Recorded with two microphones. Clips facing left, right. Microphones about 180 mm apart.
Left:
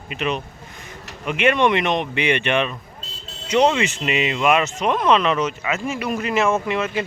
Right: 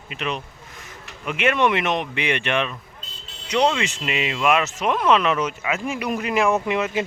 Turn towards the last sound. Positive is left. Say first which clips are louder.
# even
turn(degrees=-15)  # may be behind; listen again after turning